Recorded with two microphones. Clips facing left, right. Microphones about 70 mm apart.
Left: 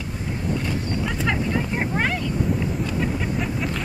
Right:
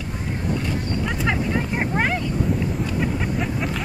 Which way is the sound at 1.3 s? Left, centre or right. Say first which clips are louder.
Right 1 dB; centre.